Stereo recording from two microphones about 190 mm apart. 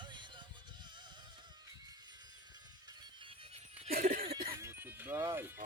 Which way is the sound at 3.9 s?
45° right (ahead or behind).